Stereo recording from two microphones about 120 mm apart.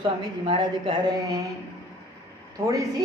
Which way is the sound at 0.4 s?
50° right (ahead or behind).